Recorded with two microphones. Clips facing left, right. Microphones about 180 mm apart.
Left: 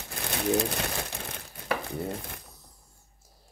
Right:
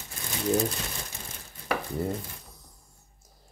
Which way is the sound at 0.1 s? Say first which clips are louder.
Even; 65° left (ahead or behind).